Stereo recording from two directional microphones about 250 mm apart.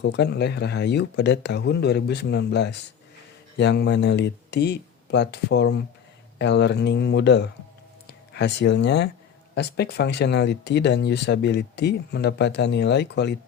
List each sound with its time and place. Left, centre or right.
0.0 s speech: left